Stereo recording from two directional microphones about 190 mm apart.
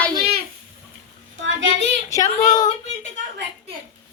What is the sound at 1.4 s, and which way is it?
Speech, 80° right.